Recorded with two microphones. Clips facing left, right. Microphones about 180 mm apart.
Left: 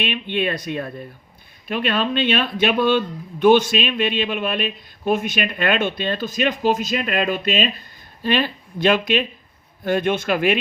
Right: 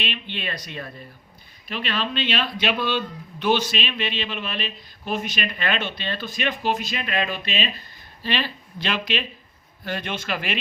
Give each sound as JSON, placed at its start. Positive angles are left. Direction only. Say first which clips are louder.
{"t": 0.0, "sound": "speech", "louder": "left 9 dB", "side_deg": 50}